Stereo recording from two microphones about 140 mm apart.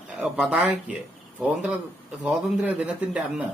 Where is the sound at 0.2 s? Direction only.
5° right (ahead or behind).